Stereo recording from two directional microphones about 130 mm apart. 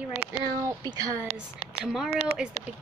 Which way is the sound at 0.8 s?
30° right (ahead or behind).